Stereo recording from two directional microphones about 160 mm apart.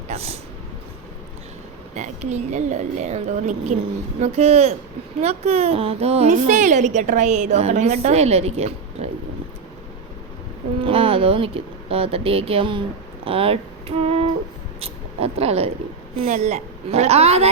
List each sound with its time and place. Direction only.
0.1 s speech: 40° right (ahead or behind)
2.0 s a woman's voice: 45° right (ahead or behind)
10.8 s a woman's voice: 35° right (ahead or behind)